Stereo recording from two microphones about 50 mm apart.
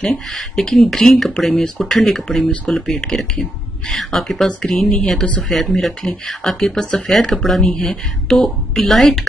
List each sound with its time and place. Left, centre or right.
0.3 s a woman's voice: centre
4.5 s speech: centre
4.7 s a woman's voice: centre